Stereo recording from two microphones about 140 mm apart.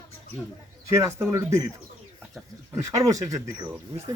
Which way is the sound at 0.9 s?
20° right (ahead or behind).